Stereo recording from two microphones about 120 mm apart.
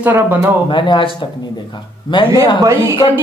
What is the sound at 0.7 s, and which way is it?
Speech, 40° left (ahead or behind).